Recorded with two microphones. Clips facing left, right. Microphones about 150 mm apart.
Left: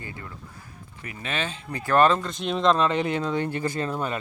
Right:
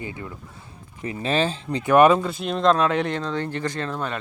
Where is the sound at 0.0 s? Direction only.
20° right (ahead or behind).